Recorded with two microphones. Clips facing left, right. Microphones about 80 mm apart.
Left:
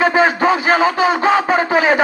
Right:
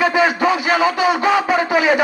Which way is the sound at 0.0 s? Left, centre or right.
Left.